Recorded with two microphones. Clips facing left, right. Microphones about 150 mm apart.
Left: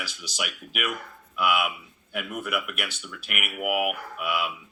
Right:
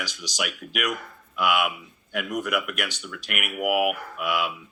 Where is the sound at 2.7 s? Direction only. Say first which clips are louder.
Right 3 dB; 40° right (ahead or behind).